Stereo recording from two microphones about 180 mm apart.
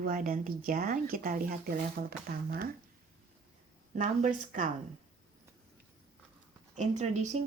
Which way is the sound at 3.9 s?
40° right (ahead or behind).